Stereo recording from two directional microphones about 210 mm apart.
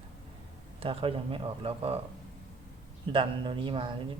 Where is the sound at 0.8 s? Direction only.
25° right (ahead or behind).